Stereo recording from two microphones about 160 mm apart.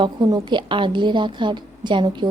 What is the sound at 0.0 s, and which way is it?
A woman's voice, 25° right (ahead or behind).